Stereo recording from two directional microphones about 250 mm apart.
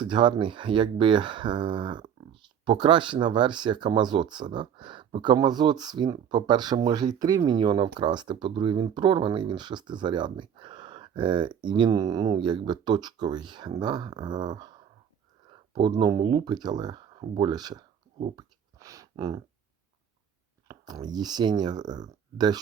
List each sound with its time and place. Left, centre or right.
0.0 s speech: centre
20.7 s speech: centre